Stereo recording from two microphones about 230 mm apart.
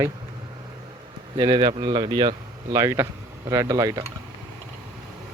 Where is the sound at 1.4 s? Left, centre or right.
Centre.